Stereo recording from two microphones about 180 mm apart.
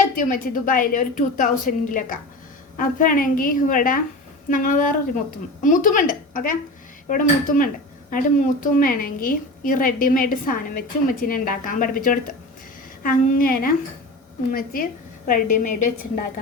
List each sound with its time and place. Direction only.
0.2 s a woman's voice: 50° left (ahead or behind)